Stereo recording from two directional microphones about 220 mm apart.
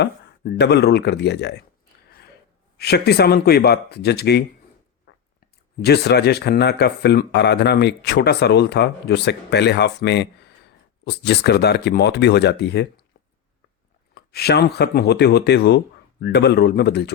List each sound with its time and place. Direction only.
0.0 s speech: 50° left (ahead or behind)
2.7 s speech: 45° left (ahead or behind)
5.1 s chewing: 55° left (ahead or behind)
5.8 s speech: 50° left (ahead or behind)
14.1 s speech: 45° left (ahead or behind)